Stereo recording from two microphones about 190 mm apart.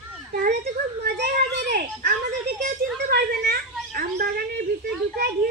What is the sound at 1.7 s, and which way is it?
A child's voice, 55° right (ahead or behind).